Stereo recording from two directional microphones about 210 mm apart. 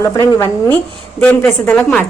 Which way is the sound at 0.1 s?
15° left (ahead or behind).